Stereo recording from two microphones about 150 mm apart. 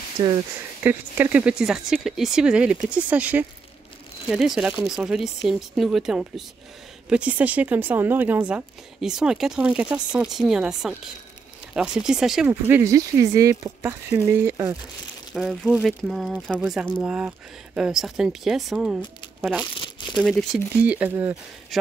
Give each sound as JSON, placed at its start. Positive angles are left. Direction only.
{"t": 0.2, "sound": "speech", "side_deg": -25}
{"t": 0.8, "sound": "speech", "side_deg": -15}
{"t": 15.3, "sound": "speech", "side_deg": 0}
{"t": 19.8, "sound": "crumpling", "side_deg": 30}
{"t": 20.2, "sound": "speech", "side_deg": 5}
{"t": 20.8, "sound": "speech", "side_deg": -10}